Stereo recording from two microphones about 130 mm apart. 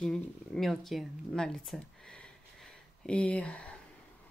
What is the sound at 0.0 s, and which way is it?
Speech, 5° left (ahead or behind).